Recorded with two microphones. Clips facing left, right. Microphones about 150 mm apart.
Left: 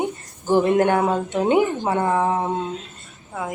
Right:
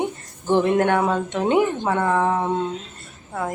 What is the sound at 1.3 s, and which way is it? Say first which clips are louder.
Speech: left 2 dB; 5° left (ahead or behind).